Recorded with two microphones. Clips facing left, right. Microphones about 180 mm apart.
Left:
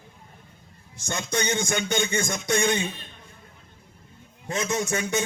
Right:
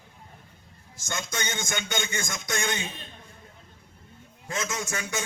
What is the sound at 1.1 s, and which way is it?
Music, 35° left (ahead or behind).